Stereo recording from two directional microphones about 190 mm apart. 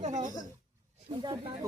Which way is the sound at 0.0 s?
40° right (ahead or behind).